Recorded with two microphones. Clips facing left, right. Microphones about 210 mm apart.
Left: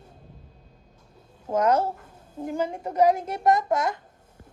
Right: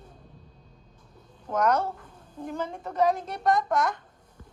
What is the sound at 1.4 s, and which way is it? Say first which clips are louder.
A child's voice: left 3 dB; 25° left (ahead or behind).